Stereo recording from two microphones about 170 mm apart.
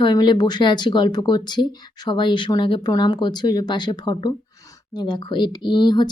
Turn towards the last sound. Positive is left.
turn(degrees=25)  # may be behind; listen again after turning